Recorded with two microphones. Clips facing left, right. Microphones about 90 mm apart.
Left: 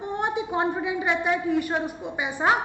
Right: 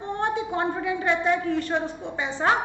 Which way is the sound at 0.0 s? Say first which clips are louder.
Right 1 dB; 15° left (ahead or behind).